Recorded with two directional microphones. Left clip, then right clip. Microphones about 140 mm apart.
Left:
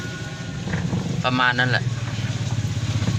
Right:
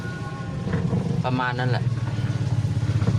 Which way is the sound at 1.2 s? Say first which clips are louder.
Left 7 dB; 15° right (ahead or behind).